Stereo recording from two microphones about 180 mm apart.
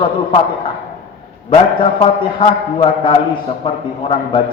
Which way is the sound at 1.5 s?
30° left (ahead or behind).